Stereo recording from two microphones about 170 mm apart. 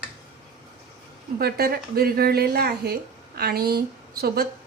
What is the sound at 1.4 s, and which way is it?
A woman's voice, 65° right (ahead or behind).